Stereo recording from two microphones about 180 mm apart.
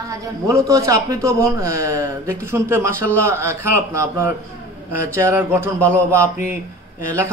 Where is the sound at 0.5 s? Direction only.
15° right (ahead or behind).